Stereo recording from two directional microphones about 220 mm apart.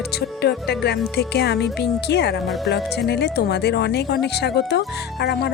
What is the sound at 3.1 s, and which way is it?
Speech, 50° left (ahead or behind).